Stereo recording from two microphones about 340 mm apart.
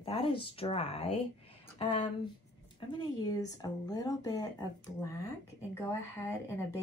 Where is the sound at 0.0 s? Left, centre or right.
Centre.